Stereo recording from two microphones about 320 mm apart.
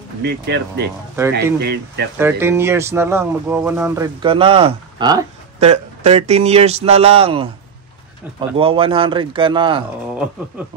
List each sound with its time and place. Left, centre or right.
0.2 s speech: right
2.1 s speech: centre